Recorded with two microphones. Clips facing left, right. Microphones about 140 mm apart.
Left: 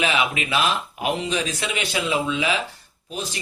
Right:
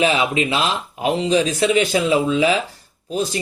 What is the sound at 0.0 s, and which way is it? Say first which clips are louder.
Speech: right 5 dB; 35° right (ahead or behind).